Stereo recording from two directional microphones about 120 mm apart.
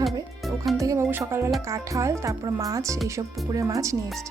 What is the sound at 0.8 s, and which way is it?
Speech, 25° right (ahead or behind).